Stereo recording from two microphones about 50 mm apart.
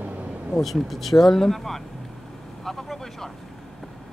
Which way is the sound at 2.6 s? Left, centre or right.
Centre.